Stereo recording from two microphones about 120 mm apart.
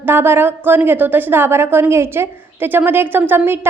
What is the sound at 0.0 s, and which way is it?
A woman's voice, 20° right (ahead or behind).